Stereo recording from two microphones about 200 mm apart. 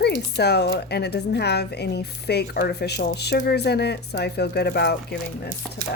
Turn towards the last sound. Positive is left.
turn(degrees=55)  # may be behind; listen again after turning